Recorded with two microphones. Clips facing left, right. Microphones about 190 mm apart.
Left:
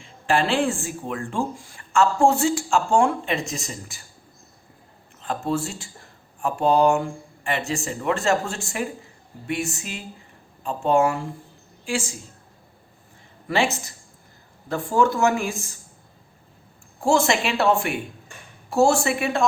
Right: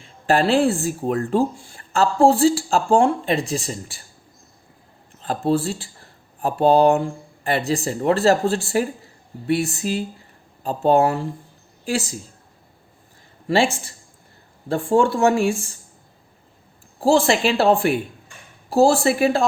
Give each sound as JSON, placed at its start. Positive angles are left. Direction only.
{"t": 0.0, "sound": "speech", "side_deg": -40}
{"t": 5.2, "sound": "speech", "side_deg": -35}
{"t": 13.5, "sound": "speech", "side_deg": -30}
{"t": 17.0, "sound": "speech", "side_deg": -30}